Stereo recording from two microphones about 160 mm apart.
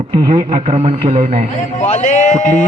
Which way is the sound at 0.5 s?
40° right (ahead or behind).